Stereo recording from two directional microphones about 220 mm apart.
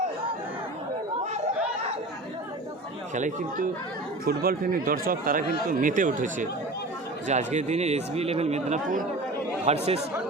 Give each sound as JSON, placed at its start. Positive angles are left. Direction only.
{"t": 3.2, "sound": "speech", "side_deg": -35}